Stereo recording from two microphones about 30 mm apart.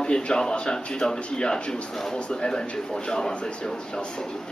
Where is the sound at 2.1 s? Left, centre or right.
Left.